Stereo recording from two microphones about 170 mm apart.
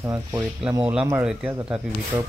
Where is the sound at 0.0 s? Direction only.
15° right (ahead or behind).